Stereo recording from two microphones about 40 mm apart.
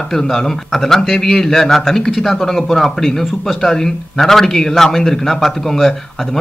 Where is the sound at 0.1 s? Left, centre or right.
Centre.